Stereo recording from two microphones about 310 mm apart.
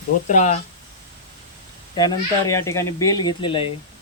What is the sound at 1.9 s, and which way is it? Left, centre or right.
Speech, centre.